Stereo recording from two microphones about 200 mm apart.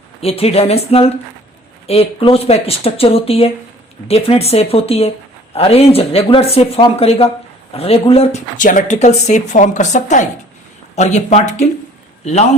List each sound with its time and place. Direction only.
0.2 s a man's voice: 30° left (ahead or behind)